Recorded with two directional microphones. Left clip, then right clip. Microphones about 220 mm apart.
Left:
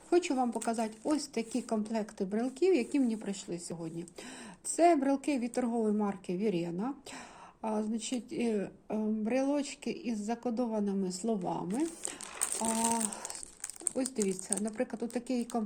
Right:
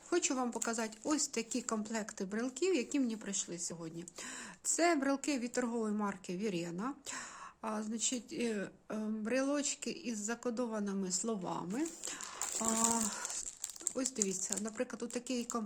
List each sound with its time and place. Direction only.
0.1 s a woman's voice: 15° right (ahead or behind)
4.8 s a woman's voice: 15° right (ahead or behind)
13.9 s a woman's voice: 10° right (ahead or behind)